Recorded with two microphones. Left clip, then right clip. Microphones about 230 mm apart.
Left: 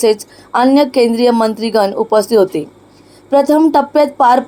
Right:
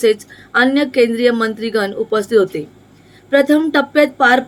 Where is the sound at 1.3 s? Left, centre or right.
Left.